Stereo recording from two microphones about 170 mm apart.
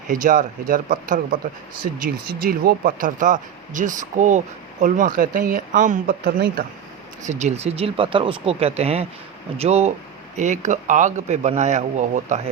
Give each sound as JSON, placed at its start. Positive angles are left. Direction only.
{"t": 0.1, "sound": "speech", "side_deg": -50}
{"t": 7.2, "sound": "speech", "side_deg": -45}